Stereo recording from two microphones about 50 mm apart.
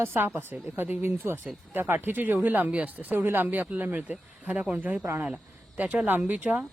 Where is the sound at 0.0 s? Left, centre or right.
Right.